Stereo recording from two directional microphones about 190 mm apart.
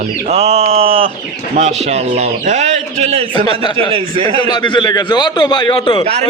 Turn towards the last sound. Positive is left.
turn(degrees=25)  # may be behind; listen again after turning